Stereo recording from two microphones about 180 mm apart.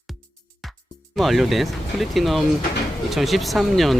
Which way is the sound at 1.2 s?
Centre (ahead or behind).